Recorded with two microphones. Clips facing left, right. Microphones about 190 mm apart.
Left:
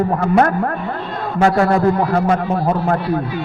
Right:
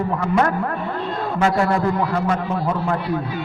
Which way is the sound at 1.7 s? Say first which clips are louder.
Left 5 dB; 50° left (ahead or behind).